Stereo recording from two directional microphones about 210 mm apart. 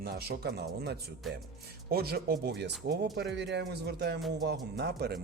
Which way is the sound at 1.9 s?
45° right (ahead or behind).